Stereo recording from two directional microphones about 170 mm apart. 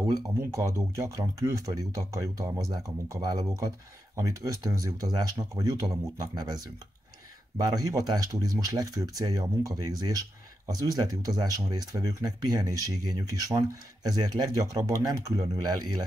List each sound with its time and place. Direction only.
0.1 s speech: 15° right (ahead or behind)